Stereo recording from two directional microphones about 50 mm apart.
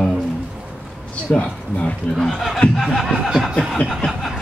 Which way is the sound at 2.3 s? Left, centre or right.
Centre.